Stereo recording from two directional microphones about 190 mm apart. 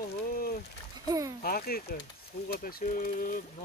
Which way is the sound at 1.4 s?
50° left (ahead or behind).